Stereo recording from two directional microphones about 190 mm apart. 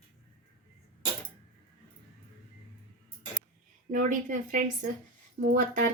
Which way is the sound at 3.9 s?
45° right (ahead or behind).